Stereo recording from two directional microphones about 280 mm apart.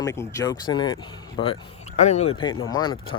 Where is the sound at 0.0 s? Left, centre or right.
Centre.